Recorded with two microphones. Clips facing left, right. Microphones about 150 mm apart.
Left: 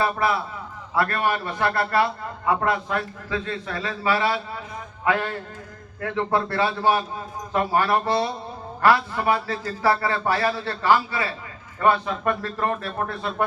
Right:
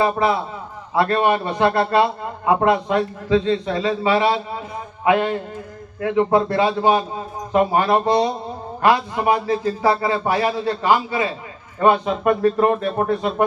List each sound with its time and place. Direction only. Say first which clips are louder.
0.0 s a man's voice: right 4 dB; 20° right (ahead or behind)